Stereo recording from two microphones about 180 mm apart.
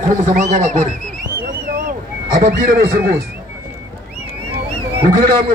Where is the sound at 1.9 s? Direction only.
50° right (ahead or behind).